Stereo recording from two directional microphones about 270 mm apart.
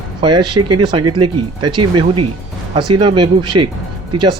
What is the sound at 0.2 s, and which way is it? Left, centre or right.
Speech, centre.